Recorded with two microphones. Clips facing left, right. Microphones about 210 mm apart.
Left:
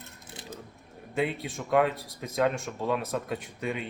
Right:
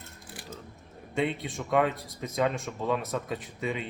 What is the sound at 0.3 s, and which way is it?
Mechanisms, 20° left (ahead or behind).